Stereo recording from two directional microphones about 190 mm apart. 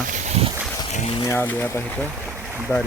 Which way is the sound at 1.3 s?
10° left (ahead or behind).